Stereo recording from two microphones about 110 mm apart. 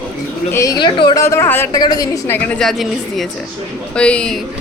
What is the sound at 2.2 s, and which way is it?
Speech, 15° left (ahead or behind).